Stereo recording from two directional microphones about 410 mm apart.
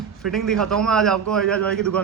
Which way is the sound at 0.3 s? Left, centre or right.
Centre.